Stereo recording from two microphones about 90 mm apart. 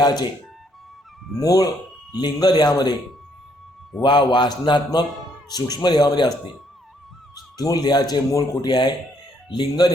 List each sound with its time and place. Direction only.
0.0 s a man's voice: 50° left (ahead or behind)
1.4 s a man's voice: 45° left (ahead or behind)
4.0 s speech: 60° left (ahead or behind)
5.5 s a man's voice: 45° left (ahead or behind)
7.5 s a man's voice: 45° left (ahead or behind)